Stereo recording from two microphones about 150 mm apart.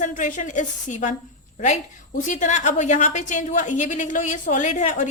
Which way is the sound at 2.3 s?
55° left (ahead or behind).